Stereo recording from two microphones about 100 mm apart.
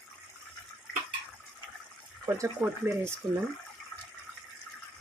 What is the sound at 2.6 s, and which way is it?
Speech, 25° right (ahead or behind).